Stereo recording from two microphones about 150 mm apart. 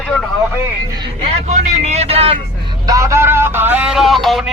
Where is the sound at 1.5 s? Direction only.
45° right (ahead or behind).